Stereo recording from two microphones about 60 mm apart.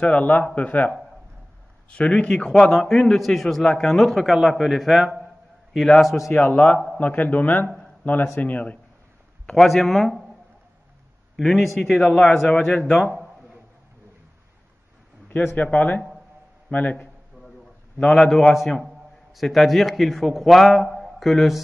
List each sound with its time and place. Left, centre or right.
0.0 s a man's voice: left; by 6.3 s centre
6.4 s a man's voice: left
9.6 s a man's voice: centre
11.4 s a man's voice: centre
12.0 s a man's voice: left
15.5 s a man's voice: left
17.9 s a man's voice: centre
18.2 s a man's voice: centre